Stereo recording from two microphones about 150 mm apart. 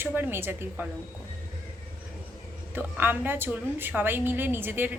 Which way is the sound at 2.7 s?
15° right (ahead or behind).